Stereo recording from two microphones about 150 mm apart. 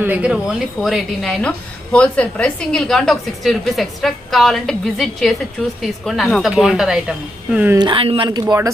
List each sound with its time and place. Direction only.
0.0 s a woman's voice: 10° right (ahead or behind)
7.7 s speech: 30° right (ahead or behind)